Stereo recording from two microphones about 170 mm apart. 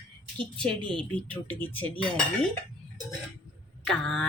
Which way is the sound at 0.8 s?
30° right (ahead or behind).